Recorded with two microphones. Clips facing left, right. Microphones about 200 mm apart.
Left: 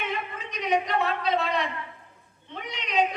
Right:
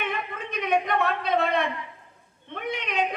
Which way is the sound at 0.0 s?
55° right (ahead or behind).